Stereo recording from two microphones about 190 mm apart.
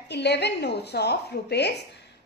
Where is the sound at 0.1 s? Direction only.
60° left (ahead or behind).